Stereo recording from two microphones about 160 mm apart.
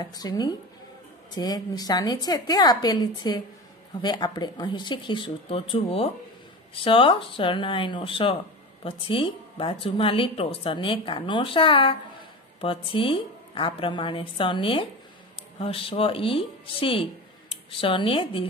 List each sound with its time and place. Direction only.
0.0 s a woman's voice: 25° left (ahead or behind)